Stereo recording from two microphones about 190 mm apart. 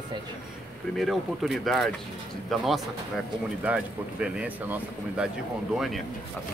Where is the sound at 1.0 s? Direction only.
Centre (ahead or behind).